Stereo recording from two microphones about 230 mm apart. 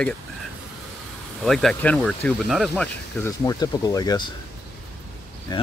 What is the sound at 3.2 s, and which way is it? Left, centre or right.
Speech, centre.